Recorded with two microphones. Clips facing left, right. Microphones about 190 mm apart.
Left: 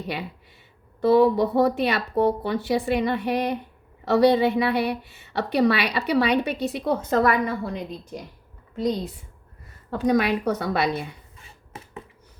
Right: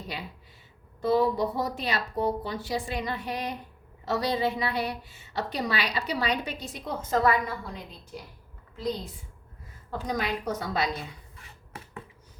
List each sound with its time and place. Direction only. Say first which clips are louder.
1.0 s a woman's voice: left 7 dB; 65° left (ahead or behind)
9.9 s a woman's voice: left 9 dB; 65° left (ahead or behind)
11.3 s a sound: left 2 dB; 25° left (ahead or behind)